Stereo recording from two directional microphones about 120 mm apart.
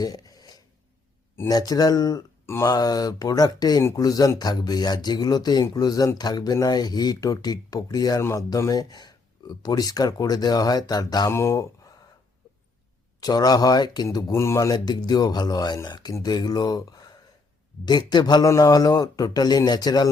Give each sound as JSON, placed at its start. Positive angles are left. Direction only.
{"t": 0.0, "sound": "a sound", "side_deg": 35}
{"t": 1.5, "sound": "speech", "side_deg": 30}
{"t": 11.3, "sound": "speech", "side_deg": 20}
{"t": 13.1, "sound": "speech", "side_deg": 35}